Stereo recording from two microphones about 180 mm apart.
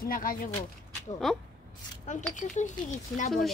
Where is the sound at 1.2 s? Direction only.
Centre (ahead or behind).